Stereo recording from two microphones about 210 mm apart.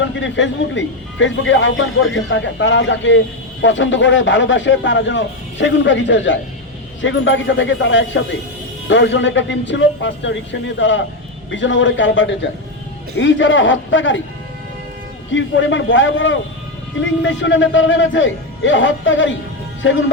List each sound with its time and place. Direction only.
0.0 s speech: 60° left (ahead or behind)
15.3 s speech: 60° left (ahead or behind)